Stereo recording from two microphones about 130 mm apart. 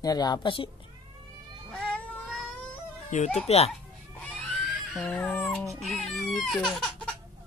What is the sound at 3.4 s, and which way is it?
Speech, 50° left (ahead or behind).